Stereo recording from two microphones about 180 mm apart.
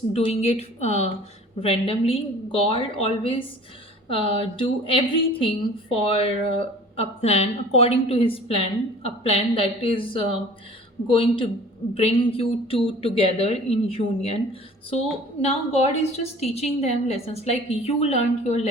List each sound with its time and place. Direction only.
0.1 s a woman's voice: 35° left (ahead or behind)